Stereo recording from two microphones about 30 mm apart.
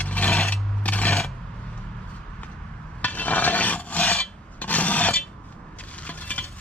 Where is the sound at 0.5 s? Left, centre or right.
Left.